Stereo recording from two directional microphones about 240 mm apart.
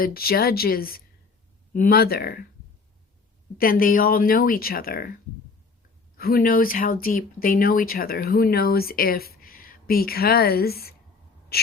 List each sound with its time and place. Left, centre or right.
0.0 s speech: left
3.6 s speech: left
6.1 s speech: left
11.5 s gasp: left